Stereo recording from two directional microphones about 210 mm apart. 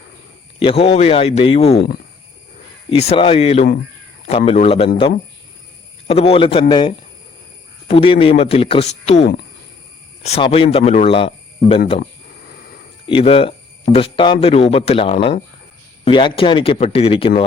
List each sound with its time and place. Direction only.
0.6 s speech: 25° left (ahead or behind)
2.9 s speech: 30° left (ahead or behind)
6.1 s speech: 25° left (ahead or behind)
9.2 s speech: 50° left (ahead or behind)
10.2 s speech: 30° left (ahead or behind)
13.1 s speech: 25° left (ahead or behind)